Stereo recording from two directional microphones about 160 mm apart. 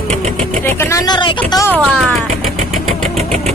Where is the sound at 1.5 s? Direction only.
20° left (ahead or behind).